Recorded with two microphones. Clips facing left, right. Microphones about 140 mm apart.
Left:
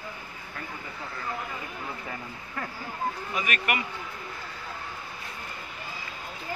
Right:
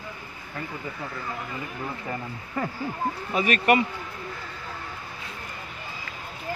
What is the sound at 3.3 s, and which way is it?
Speech, 30° right (ahead or behind).